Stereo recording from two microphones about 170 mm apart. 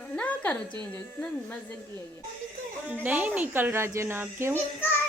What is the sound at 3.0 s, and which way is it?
Speech, 10° right (ahead or behind).